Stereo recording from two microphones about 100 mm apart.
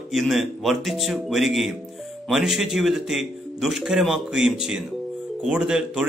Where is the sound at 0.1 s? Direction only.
Centre (ahead or behind).